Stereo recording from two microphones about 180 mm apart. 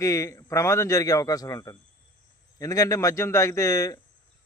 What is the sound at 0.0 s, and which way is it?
A man's voice, 15° left (ahead or behind).